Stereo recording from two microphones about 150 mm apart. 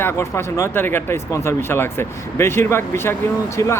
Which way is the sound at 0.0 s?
15° left (ahead or behind).